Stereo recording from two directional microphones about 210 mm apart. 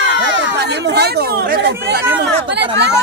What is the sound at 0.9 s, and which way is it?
Speech, 50° right (ahead or behind).